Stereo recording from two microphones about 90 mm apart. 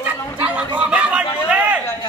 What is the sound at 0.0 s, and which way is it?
Chatter, 15° right (ahead or behind).